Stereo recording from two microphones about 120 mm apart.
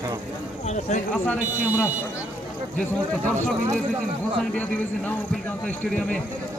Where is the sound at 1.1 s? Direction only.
10° left (ahead or behind).